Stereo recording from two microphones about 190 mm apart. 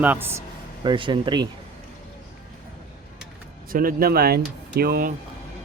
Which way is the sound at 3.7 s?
50° right (ahead or behind).